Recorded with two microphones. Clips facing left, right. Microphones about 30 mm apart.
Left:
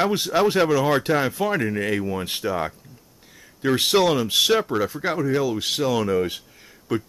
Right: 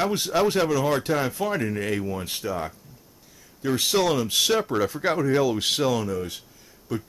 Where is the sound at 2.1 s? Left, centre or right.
Left.